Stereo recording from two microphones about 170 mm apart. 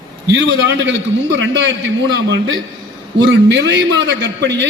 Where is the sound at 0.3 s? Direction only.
85° right.